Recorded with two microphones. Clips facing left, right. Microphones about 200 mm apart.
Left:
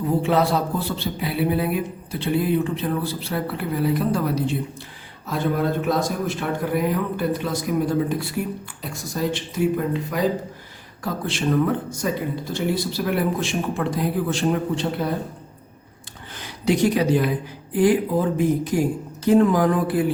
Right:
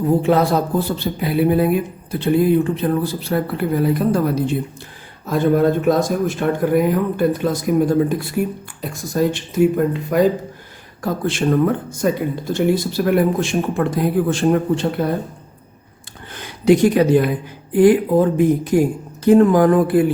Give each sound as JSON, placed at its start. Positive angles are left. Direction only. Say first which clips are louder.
{"t": 0.2, "sound": "speech", "louder": "right 4 dB", "side_deg": -45}
{"t": 16.3, "sound": "speech", "louder": "right 8 dB", "side_deg": -55}